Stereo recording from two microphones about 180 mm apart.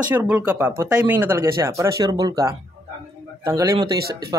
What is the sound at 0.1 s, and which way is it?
Speech, 10° right (ahead or behind).